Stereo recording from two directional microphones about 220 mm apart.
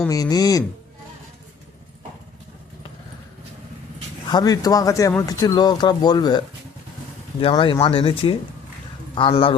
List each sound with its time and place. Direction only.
0.1 s speech: 15° left (ahead or behind)
4.3 s speech: 15° left (ahead or behind)
7.4 s speech: 25° left (ahead or behind)